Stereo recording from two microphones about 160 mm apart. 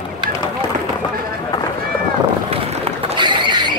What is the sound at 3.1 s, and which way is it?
Rodents, 30° right (ahead or behind).